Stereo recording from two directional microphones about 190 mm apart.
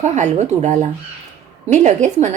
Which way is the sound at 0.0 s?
35° right (ahead or behind).